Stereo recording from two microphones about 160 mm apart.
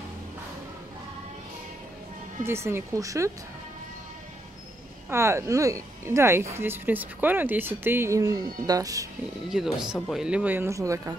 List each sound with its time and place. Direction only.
2.4 s speech: 15° right (ahead or behind)
5.1 s speech: 15° right (ahead or behind)
9.5 s speech: 5° right (ahead or behind); by 11.1 s 20° right (ahead or behind)